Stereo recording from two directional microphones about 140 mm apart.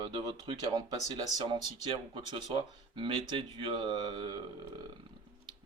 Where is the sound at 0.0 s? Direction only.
35° right (ahead or behind).